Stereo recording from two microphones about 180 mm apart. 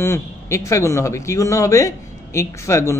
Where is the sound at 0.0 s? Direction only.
15° left (ahead or behind).